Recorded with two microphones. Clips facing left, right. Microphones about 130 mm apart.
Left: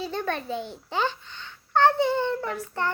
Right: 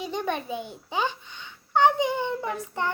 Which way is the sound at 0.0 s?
15° right (ahead or behind).